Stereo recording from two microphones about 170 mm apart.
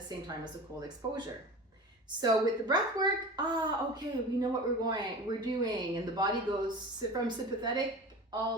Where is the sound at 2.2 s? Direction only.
25° right (ahead or behind).